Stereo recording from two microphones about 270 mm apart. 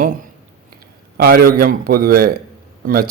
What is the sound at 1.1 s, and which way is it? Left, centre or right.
A man's voice, right.